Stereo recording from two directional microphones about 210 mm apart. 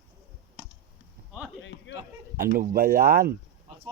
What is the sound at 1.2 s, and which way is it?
Clip-clop, 45° right (ahead or behind).